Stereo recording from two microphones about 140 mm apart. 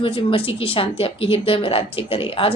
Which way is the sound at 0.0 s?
40° left (ahead or behind).